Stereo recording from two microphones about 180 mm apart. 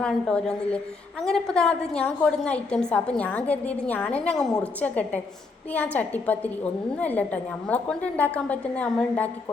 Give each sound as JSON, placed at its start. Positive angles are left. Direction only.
{"t": 0.0, "sound": "a woman's voice", "side_deg": 5}